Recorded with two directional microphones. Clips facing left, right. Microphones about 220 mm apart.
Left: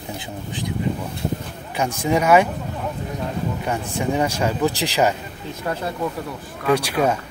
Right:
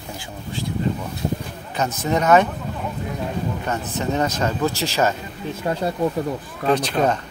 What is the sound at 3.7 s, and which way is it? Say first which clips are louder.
Speech: left 2 dB; 10° left (ahead or behind).